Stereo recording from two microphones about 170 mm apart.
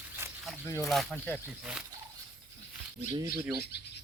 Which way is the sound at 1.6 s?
5° right (ahead or behind).